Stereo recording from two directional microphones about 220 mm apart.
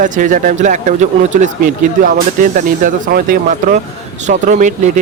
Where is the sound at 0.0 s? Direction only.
35° right (ahead or behind).